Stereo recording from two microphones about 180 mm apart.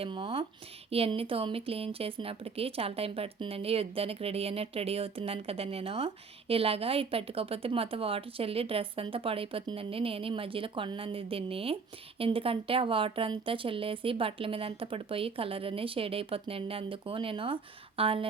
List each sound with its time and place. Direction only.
0.0 s speech: 30° right (ahead or behind)